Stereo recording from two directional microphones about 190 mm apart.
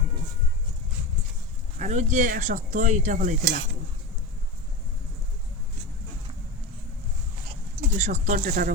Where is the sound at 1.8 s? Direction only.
40° right (ahead or behind).